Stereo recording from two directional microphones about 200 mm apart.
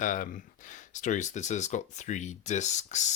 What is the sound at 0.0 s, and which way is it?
Speech, 40° left (ahead or behind).